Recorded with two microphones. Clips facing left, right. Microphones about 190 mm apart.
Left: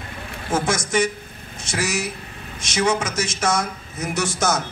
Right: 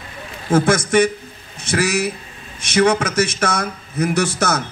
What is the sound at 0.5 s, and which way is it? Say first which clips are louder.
A man's voice: right 7 dB; 60° right (ahead or behind).